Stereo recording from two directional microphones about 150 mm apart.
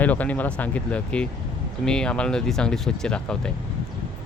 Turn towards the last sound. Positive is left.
turn(degrees=5)  # may be behind; listen again after turning